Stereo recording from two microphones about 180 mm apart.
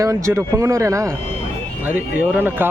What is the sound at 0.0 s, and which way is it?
Speech, 15° right (ahead or behind).